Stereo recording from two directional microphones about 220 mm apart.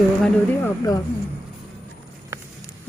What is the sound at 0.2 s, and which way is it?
Speech, 10° left (ahead or behind).